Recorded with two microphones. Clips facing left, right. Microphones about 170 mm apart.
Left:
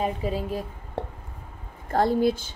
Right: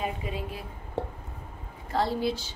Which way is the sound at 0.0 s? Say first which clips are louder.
Left 6 dB; 40° left (ahead or behind).